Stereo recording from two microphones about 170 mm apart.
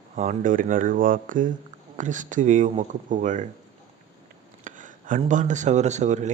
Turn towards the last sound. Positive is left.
turn(degrees=-45)  # may be behind; listen again after turning